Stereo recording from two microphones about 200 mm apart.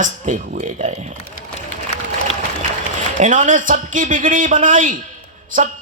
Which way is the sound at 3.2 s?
40° right (ahead or behind).